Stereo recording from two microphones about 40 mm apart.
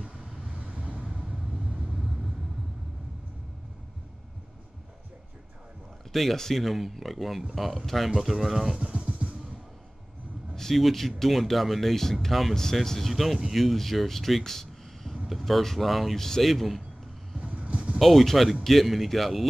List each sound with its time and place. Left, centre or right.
0.0 s vehicle: right
6.1 s speech: centre
8.7 s music: right
10.5 s speech: centre
13.1 s speech: centre
15.2 s speech: centre
17.4 s a sound: right
17.9 s speech: centre